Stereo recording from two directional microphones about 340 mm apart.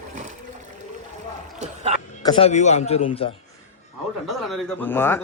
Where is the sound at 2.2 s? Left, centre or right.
Centre.